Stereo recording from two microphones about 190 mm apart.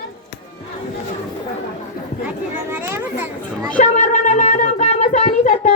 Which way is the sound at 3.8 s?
40° left (ahead or behind).